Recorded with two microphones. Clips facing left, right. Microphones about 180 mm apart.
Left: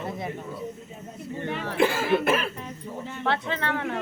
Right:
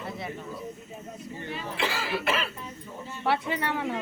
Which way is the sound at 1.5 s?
65° left (ahead or behind).